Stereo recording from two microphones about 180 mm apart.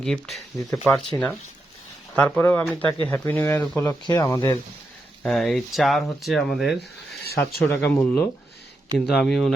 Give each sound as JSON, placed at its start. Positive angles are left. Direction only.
{"t": 0.0, "sound": "speech", "side_deg": 0}
{"t": 5.2, "sound": "speech", "side_deg": 0}
{"t": 7.6, "sound": "speech", "side_deg": 10}
{"t": 9.0, "sound": "speech", "side_deg": 0}